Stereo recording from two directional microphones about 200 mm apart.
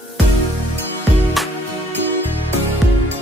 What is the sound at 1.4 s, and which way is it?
Music, centre (ahead or behind).